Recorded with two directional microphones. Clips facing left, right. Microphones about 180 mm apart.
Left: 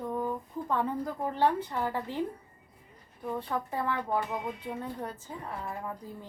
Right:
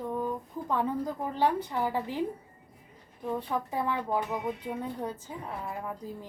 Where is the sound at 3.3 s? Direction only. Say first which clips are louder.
Right 1 dB; 15° right (ahead or behind).